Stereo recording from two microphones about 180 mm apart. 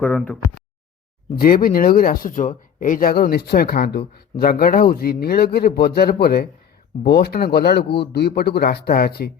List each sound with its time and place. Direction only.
1.4 s speech: 55° left (ahead or behind)